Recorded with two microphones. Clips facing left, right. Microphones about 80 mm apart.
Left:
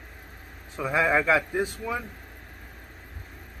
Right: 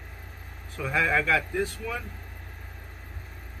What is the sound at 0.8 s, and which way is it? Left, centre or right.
Speech, centre.